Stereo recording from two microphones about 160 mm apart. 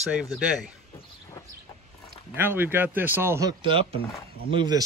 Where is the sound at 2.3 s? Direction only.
15° right (ahead or behind).